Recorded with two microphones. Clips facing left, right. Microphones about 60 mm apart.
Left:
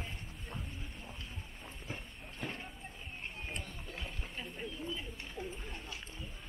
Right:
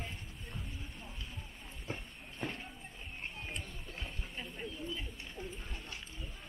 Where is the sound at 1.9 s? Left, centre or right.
Centre.